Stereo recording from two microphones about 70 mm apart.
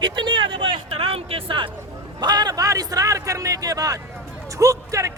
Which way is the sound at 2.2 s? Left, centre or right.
Right.